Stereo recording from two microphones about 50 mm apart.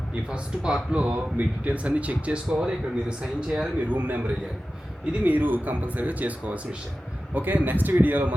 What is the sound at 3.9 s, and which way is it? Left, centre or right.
Speech, right.